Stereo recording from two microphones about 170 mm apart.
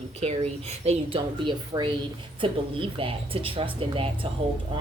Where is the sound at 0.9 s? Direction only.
30° right (ahead or behind).